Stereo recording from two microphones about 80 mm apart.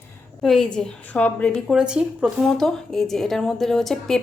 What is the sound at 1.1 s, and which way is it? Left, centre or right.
Speech, centre.